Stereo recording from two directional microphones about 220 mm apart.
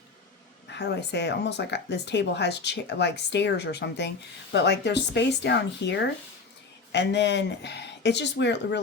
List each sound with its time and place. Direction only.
0.7 s speech: 50° left (ahead or behind)